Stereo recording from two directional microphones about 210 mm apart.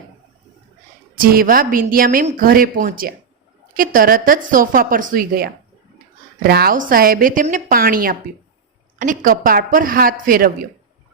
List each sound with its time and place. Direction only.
1.1 s a woman's voice: 45° right (ahead or behind)